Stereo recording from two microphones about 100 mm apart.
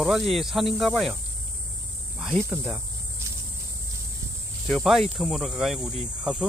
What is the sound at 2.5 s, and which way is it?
Speech, 20° right (ahead or behind).